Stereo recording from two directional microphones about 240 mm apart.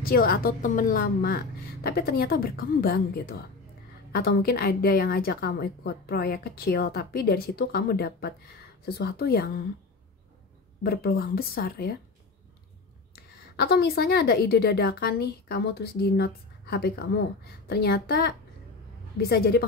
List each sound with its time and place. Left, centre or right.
0.0 s a woman's voice: left
10.8 s a woman's voice: left
13.1 s a woman's voice: left